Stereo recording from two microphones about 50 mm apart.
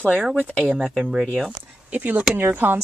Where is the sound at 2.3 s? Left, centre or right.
Right.